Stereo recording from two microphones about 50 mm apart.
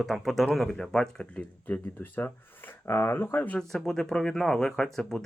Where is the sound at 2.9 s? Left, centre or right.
Left.